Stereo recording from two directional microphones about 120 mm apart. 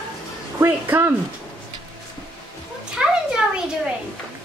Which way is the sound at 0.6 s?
15° right (ahead or behind).